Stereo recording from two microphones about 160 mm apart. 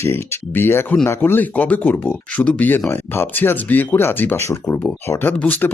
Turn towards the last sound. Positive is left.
turn(degrees=10)  # may be behind; listen again after turning